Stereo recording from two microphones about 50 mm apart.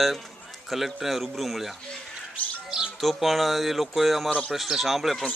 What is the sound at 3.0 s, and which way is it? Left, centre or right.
Speech, centre.